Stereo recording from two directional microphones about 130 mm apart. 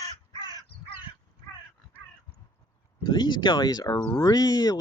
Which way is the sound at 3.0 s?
35° left (ahead or behind).